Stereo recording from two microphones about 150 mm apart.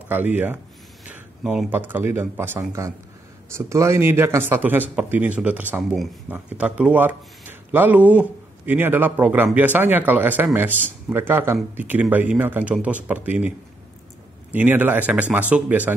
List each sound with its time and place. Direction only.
0.1 s speech: 10° right (ahead or behind)
1.0 s a sound: 10° right (ahead or behind)
1.7 s speech: 15° right (ahead or behind)
14.5 s speech: 10° right (ahead or behind)